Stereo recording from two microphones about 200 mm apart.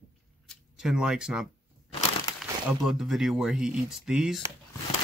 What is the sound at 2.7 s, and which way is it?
Speech, centre (ahead or behind).